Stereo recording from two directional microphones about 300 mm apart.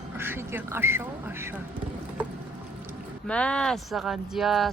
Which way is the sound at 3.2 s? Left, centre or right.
Centre.